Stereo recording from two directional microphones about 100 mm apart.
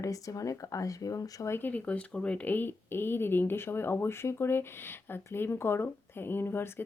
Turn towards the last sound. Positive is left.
turn(degrees=20)  # may be behind; listen again after turning